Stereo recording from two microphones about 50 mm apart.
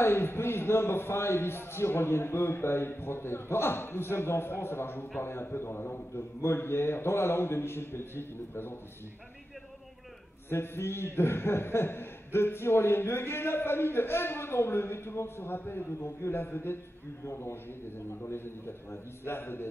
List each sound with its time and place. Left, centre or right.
0.0 s a man's voice: left
10.5 s a man's voice: left
17.2 s a man's voice: left